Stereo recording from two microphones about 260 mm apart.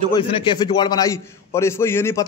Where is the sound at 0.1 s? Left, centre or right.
Centre.